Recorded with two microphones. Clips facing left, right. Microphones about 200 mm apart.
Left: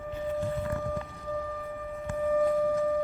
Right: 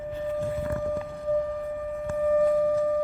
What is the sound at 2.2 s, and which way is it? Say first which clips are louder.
Singing bowl: right 3 dB; 30° right (ahead or behind).